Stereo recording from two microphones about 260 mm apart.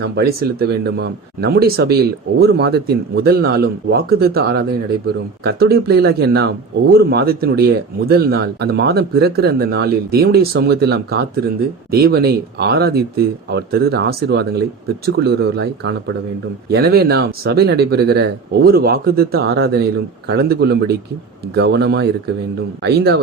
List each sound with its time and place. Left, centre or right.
0.9 s speech: right